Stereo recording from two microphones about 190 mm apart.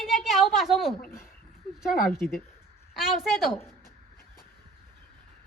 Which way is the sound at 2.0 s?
5° left (ahead or behind).